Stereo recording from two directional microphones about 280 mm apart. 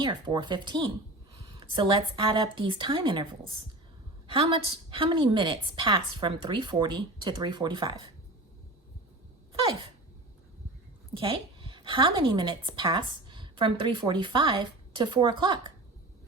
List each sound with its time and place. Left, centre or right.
0.0 s a woman's voice: centre
4.9 s a woman's voice: centre
9.5 s sneeze: centre
11.1 s a woman's voice: centre